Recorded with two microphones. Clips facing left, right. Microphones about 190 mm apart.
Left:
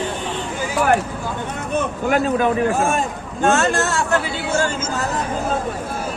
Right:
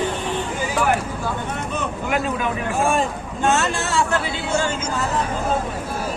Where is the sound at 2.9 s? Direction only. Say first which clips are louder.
Even; 45° left (ahead or behind).